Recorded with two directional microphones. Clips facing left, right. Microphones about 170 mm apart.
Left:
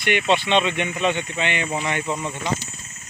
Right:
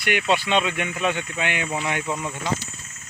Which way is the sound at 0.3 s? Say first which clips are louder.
Left 2 dB; 10° right (ahead or behind).